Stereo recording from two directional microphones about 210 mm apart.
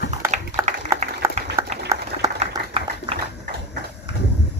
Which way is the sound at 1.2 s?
10° right (ahead or behind).